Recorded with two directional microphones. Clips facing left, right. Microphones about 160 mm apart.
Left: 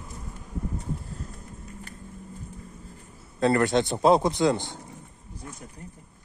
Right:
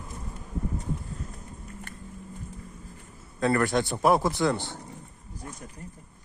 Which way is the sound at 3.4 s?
25° left (ahead or behind).